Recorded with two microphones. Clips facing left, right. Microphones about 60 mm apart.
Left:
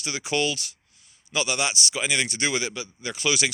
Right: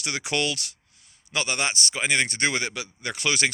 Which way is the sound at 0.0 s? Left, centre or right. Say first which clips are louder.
Left 1 dB; right.